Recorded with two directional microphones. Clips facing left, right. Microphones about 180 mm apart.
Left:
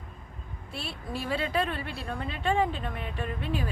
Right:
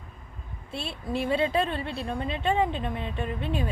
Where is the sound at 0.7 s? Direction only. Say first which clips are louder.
Right 5 dB; 25° right (ahead or behind).